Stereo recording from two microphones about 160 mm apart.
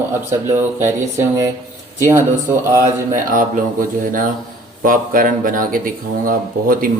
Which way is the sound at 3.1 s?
60° right (ahead or behind).